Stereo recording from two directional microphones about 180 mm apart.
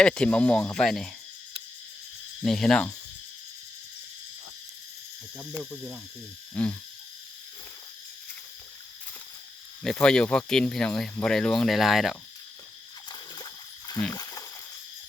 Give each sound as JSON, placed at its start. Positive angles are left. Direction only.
{"t": 0.0, "sound": "speech", "side_deg": 5}
{"t": 2.4, "sound": "speech", "side_deg": 0}
{"t": 5.4, "sound": "speech", "side_deg": 5}
{"t": 6.5, "sound": "a sound", "side_deg": 10}
{"t": 9.8, "sound": "speech", "side_deg": 5}
{"t": 13.1, "sound": "splash", "side_deg": 25}
{"t": 14.1, "sound": "a sound", "side_deg": 20}